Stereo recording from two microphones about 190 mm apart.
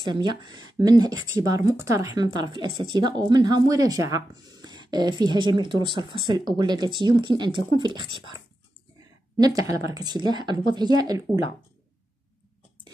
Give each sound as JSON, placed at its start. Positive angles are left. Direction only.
{"t": 0.0, "sound": "speech", "side_deg": -25}
{"t": 9.6, "sound": "speech", "side_deg": -20}